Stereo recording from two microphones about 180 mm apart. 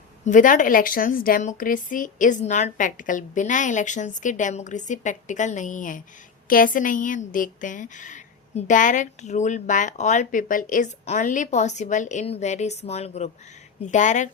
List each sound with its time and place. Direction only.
0.3 s a woman's voice: 45° left (ahead or behind)